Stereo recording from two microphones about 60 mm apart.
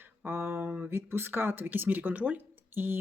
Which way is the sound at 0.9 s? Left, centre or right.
Right.